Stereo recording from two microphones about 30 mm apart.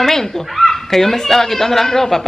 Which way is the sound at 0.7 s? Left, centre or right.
Centre.